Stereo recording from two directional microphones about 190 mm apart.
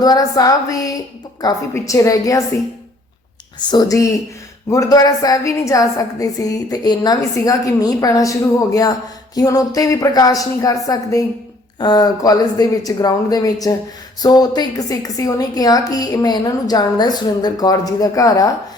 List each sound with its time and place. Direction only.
0.0 s a woman's voice: 20° left (ahead or behind)
3.6 s a woman's voice: 20° left (ahead or behind)